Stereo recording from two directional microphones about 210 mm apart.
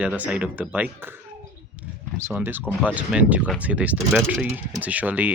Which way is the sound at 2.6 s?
5° left (ahead or behind).